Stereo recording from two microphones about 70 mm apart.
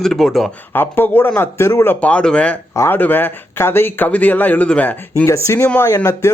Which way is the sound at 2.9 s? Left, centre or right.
Left.